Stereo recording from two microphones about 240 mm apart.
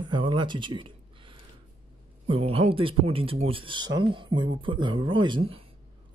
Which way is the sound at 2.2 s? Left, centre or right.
Right.